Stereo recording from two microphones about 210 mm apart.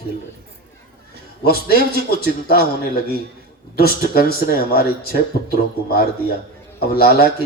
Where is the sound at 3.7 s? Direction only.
45° left (ahead or behind).